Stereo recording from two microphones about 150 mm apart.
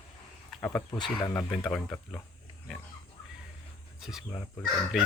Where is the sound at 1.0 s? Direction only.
35° left (ahead or behind).